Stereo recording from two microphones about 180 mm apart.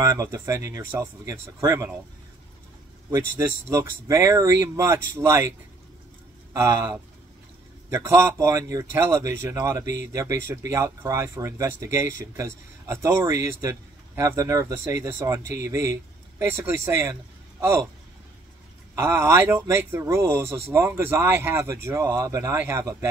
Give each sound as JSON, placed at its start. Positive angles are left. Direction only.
{"t": 0.0, "sound": "speech", "side_deg": -20}
{"t": 3.1, "sound": "speech", "side_deg": -15}
{"t": 6.5, "sound": "speech", "side_deg": -15}
{"t": 18.9, "sound": "speech", "side_deg": -15}